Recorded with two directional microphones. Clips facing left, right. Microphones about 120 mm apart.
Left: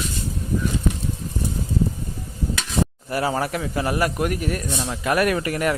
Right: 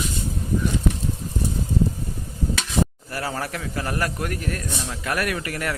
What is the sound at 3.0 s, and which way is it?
A man's voice, 20° left (ahead or behind).